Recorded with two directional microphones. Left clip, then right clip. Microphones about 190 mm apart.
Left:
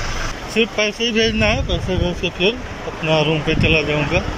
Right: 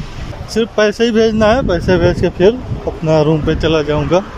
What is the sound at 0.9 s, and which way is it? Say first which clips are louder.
Speech: right 6 dB; 45° right (ahead or behind).